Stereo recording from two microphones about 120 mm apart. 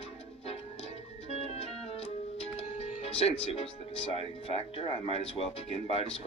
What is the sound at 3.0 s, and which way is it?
Speech, 55° left (ahead or behind).